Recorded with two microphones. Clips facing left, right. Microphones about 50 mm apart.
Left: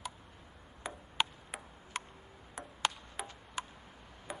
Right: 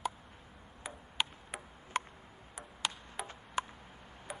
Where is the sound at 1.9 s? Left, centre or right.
Right.